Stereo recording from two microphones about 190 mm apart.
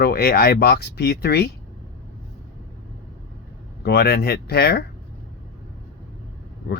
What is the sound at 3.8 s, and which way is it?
Speech, 55° left (ahead or behind).